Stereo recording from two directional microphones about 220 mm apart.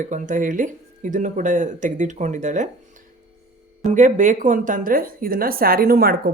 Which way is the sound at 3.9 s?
35° right (ahead or behind).